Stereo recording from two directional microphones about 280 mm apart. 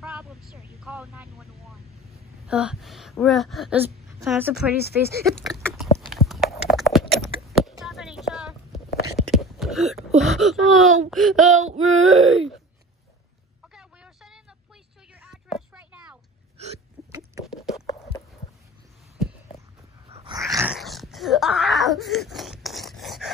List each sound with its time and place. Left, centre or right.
0.0 s vehicle: centre
2.4 s speech: centre
5.9 s horse: centre
7.4 s a sound: centre
11.1 s speech: centre
11.5 s female singing: right
12.1 s speech: centre
13.7 s a sound: centre
20.1 s dog: centre
20.5 s dog: centre